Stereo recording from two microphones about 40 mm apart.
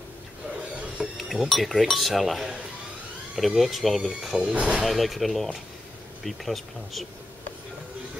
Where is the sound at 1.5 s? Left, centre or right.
Centre.